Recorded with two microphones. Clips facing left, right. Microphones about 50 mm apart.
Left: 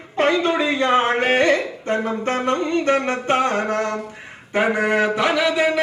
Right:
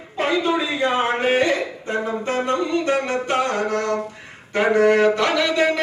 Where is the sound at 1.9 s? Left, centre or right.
Left.